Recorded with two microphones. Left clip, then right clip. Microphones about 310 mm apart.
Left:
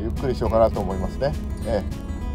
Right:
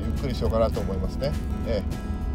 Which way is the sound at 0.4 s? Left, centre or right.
Right.